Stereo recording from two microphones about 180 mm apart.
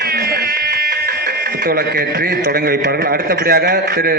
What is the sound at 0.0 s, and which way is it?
Speech, 55° right (ahead or behind).